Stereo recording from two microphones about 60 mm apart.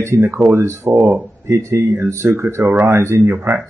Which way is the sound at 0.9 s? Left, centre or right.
Right.